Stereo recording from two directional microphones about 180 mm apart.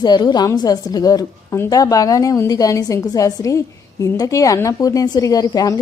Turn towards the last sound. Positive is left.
turn(degrees=20)  # may be behind; listen again after turning